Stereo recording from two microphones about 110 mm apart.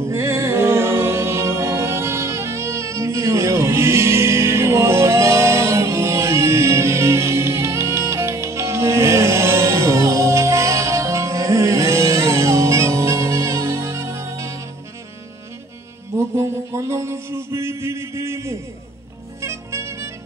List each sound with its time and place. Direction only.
0.1 s music: 25° right (ahead or behind)
16.3 s music: 25° right (ahead or behind)